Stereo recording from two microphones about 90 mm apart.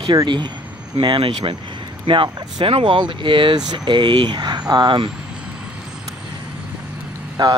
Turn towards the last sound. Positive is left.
turn(degrees=-55)  # may be behind; listen again after turning